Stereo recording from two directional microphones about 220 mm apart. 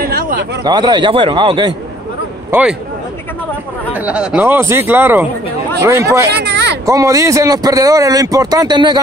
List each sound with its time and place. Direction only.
0.0 s a sound: 40° right (ahead or behind)
0.7 s a man's voice: 20° right (ahead or behind)
2.5 s a man's voice: 10° right (ahead or behind)
4.0 s a man's voice: 5° right (ahead or behind)
6.3 s a sound: 50° right (ahead or behind)
6.9 s a man's voice: 15° right (ahead or behind)